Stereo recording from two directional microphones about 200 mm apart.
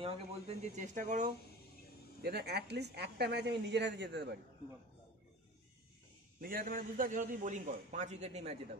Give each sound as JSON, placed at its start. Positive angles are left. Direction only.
{"t": 0.0, "sound": "a man's voice", "side_deg": -35}
{"t": 2.2, "sound": "speech", "side_deg": -55}
{"t": 6.4, "sound": "a man's voice", "side_deg": -45}